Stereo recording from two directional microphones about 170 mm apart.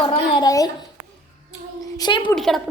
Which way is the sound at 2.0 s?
30° left (ahead or behind).